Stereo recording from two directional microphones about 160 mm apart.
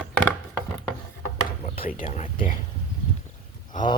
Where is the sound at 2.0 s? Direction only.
50° left (ahead or behind).